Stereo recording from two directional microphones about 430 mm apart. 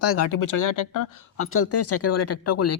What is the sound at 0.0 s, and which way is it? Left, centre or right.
Speech, left.